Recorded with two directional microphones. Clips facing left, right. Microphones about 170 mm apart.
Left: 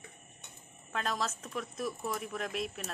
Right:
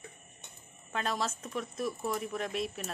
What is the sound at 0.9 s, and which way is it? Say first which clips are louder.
Speech: right 1 dB; centre (ahead or behind).